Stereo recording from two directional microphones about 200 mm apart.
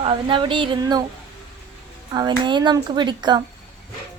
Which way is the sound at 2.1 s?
20° right (ahead or behind).